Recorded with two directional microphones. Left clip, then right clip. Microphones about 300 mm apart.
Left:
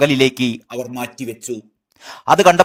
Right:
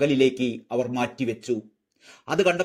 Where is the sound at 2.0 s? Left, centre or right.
Left.